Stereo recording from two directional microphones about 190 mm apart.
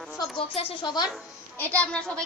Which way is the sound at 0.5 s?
25° left (ahead or behind).